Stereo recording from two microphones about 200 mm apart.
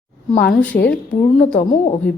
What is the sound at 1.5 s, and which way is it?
Speech, 35° left (ahead or behind).